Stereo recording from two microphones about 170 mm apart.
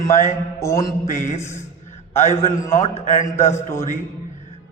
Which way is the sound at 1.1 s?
45° left (ahead or behind).